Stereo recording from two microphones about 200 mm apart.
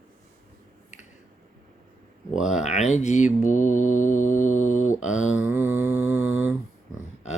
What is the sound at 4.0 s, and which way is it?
Mantra, 40° left (ahead or behind).